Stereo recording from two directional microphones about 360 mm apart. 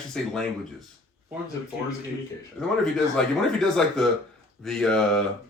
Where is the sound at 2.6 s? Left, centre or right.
Centre.